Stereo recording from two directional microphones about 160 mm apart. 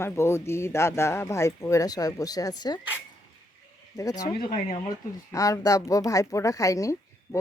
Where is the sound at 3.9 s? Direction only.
20° left (ahead or behind).